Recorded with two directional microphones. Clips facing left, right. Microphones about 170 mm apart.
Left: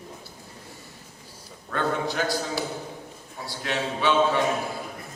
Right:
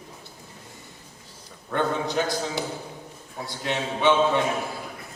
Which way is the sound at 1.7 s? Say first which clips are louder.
Right 2 dB; 20° right (ahead or behind).